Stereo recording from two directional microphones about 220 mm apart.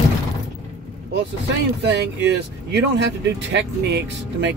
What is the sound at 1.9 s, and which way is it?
Speech, 50° right (ahead or behind).